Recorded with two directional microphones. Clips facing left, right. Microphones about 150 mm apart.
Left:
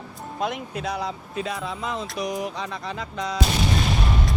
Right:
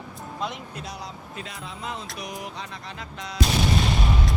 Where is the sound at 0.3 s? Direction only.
55° left (ahead or behind).